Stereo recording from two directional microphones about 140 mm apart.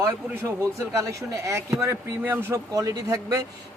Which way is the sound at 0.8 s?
20° right (ahead or behind).